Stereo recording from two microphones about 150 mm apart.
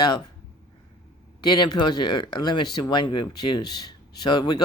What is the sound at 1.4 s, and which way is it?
Speech, 30° left (ahead or behind).